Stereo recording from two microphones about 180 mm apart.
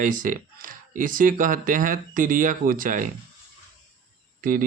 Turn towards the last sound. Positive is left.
turn(degrees=-50)  # may be behind; listen again after turning